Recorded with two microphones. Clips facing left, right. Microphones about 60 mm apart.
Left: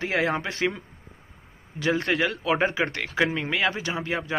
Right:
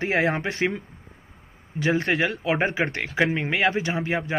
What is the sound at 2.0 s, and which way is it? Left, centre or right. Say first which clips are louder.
Speech: right 1 dB; right.